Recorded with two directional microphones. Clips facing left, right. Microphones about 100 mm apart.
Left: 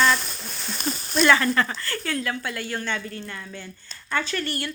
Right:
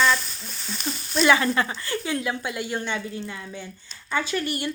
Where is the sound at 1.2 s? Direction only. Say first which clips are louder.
Even; 15° right (ahead or behind).